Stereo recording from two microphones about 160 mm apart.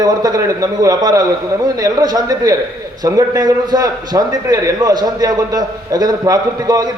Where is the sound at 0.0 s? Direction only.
25° right (ahead or behind).